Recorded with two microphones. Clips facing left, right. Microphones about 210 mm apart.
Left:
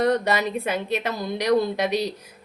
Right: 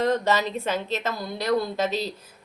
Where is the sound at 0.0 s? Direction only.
15° left (ahead or behind).